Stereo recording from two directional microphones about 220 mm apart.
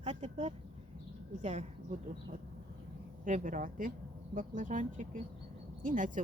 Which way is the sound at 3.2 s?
35° right (ahead or behind).